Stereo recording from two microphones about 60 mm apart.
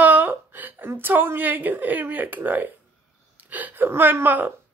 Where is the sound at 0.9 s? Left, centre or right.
Right.